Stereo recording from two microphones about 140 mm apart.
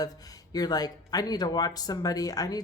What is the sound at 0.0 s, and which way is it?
Speech, 25° left (ahead or behind).